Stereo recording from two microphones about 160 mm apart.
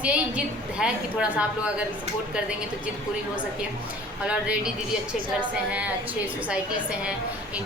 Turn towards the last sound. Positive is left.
turn(degrees=-5)  # may be behind; listen again after turning